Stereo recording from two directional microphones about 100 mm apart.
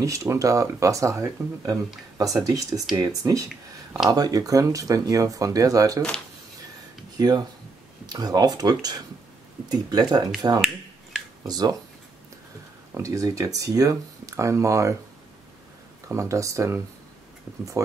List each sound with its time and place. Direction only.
0.0 s speech: 30° right (ahead or behind)
7.2 s speech: 45° right (ahead or behind)
12.9 s speech: 35° right (ahead or behind)
16.1 s speech: 30° right (ahead or behind)